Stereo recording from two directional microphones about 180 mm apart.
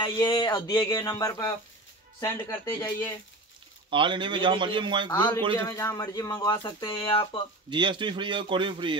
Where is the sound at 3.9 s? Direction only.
25° right (ahead or behind).